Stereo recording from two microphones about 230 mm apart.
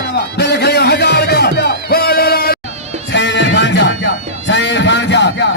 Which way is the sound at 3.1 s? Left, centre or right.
Left.